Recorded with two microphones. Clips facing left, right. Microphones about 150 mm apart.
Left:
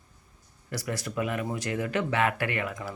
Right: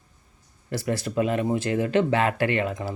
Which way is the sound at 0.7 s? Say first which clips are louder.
Right 6 dB; 30° right (ahead or behind).